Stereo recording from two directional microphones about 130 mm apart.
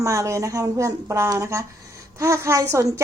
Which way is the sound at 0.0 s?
25° right (ahead or behind).